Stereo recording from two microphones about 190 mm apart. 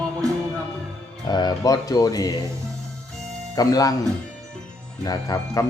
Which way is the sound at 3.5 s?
20° left (ahead or behind).